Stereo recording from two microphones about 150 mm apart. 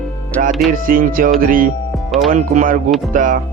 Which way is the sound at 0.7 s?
70° right (ahead or behind).